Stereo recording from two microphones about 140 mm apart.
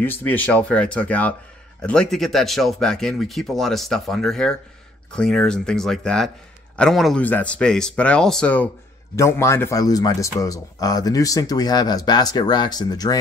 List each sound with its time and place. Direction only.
0.0 s speech: 15° left (ahead or behind)
9.1 s speech: 20° left (ahead or behind)